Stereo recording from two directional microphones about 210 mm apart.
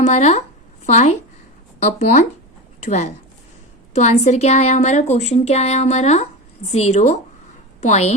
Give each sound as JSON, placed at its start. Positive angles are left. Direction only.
{"t": 0.0, "sound": "a woman's voice", "side_deg": 30}